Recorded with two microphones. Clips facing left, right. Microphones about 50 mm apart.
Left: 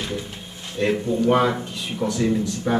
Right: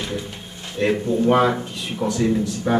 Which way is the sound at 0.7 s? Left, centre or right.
Centre.